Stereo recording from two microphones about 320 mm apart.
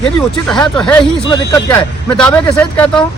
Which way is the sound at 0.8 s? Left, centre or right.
Centre.